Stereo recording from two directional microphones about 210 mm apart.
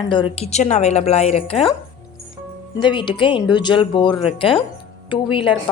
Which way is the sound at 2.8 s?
20° left (ahead or behind).